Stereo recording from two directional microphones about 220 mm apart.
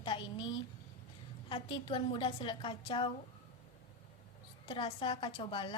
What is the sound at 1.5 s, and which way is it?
A woman's voice, 25° left (ahead or behind).